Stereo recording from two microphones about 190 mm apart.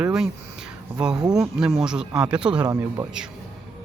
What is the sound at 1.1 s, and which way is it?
Speech, 20° right (ahead or behind).